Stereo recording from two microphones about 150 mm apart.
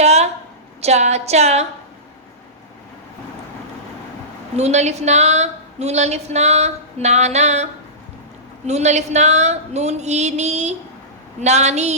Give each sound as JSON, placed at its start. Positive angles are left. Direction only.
{"t": 0.0, "sound": "a sound", "side_deg": -45}
{"t": 0.8, "sound": "a woman's voice", "side_deg": -45}
{"t": 4.5, "sound": "a woman's voice", "side_deg": -50}